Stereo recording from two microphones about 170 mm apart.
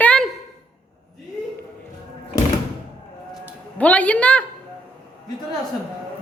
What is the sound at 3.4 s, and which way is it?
A woman's voice, 10° left (ahead or behind).